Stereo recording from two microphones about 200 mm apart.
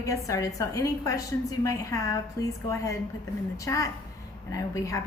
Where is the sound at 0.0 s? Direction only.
15° left (ahead or behind).